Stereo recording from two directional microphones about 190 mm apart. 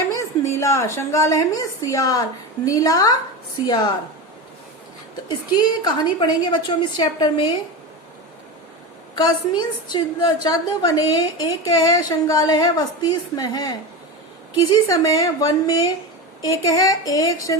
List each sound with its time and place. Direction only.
0.1 s a woman's voice: 15° left (ahead or behind)
5.5 s a woman's voice: 25° left (ahead or behind)
9.1 s a woman's voice: 25° left (ahead or behind)